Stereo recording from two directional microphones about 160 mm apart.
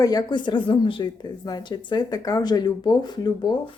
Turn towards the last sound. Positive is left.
turn(degrees=25)  # may be behind; listen again after turning